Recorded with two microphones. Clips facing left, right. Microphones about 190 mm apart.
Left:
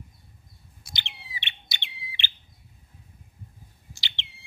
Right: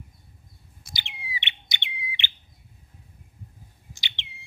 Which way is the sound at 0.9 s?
15° right (ahead or behind).